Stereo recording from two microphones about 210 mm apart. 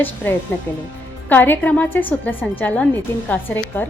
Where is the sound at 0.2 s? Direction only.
10° left (ahead or behind).